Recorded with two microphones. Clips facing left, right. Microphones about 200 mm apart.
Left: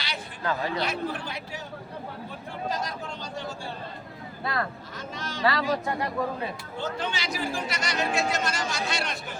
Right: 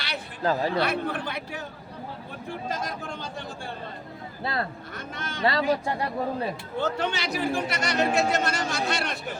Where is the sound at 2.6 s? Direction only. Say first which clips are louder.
Left 2 dB; 50° right (ahead or behind).